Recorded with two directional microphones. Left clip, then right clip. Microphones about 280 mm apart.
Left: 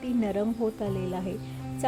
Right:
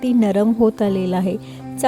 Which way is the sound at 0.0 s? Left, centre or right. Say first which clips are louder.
Right 11 dB; right.